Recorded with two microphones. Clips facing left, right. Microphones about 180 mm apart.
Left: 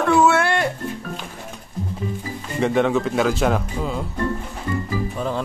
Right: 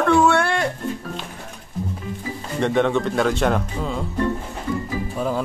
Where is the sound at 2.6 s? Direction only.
Centre (ahead or behind).